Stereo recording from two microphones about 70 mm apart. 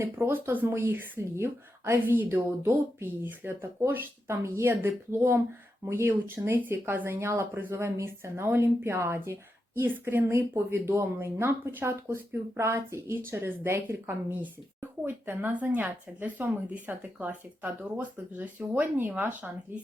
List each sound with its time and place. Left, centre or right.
0.0 s a woman's voice: right